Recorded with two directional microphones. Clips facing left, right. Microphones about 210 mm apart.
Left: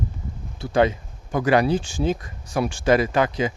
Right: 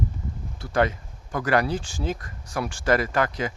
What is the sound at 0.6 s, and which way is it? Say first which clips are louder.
Speech: left 4 dB; 25° left (ahead or behind).